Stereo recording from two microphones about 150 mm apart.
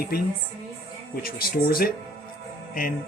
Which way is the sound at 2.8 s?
70° left (ahead or behind).